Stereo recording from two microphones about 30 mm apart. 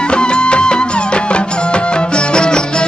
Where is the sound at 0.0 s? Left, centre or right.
Left.